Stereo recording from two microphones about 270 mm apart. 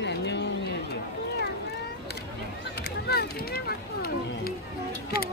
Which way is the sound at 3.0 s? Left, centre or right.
Left.